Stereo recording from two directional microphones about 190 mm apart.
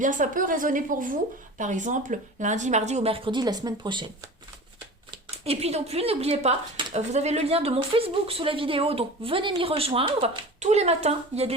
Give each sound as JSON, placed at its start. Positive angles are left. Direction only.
{"t": 0.0, "sound": "a woman's voice", "side_deg": -40}
{"t": 5.5, "sound": "a woman's voice", "side_deg": -35}